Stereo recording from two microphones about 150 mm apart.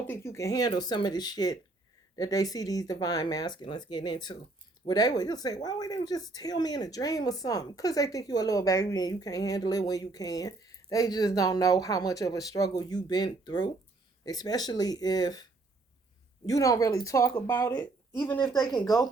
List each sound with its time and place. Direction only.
0.1 s speech: 15° left (ahead or behind)
16.5 s speech: 25° left (ahead or behind)
18.3 s speech: 30° left (ahead or behind)